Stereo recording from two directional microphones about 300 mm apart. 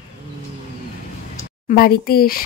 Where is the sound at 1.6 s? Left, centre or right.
Left.